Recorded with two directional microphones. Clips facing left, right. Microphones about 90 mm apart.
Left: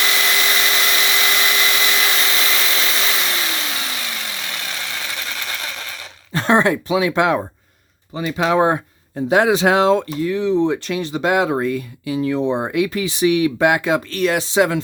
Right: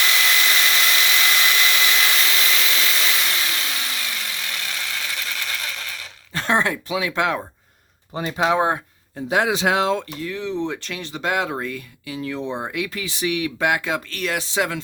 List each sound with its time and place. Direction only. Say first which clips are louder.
0.0 s hair dryer: left 1 dB; 20° left (ahead or behind)
2.1 s vehicle: left 2 dB; 40° left (ahead or behind); by 7.4 s 20° left (ahead or behind)
8.1 s speech: left 3 dB; 35° right (ahead or behind)
8.5 s speech: left 8 dB; centre (ahead or behind)
9.1 s speech: left 5 dB; 40° left (ahead or behind)
10.2 s speech: left 9 dB; 10° left (ahead or behind)